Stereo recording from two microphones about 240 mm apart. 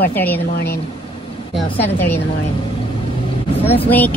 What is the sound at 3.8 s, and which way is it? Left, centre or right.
Speech, centre.